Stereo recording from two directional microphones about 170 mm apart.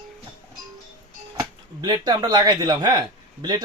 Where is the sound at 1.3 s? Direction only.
20° right (ahead or behind).